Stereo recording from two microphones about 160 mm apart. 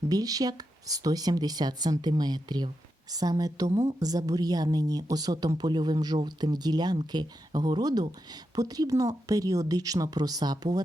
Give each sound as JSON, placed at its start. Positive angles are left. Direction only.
{"t": 0.1, "sound": "a woman's voice", "side_deg": -25}